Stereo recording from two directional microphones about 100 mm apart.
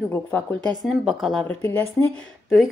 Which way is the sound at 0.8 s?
Centre (ahead or behind).